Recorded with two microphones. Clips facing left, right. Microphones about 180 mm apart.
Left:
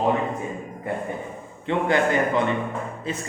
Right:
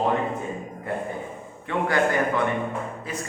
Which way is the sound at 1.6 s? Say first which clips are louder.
Left 2 dB; 20° left (ahead or behind).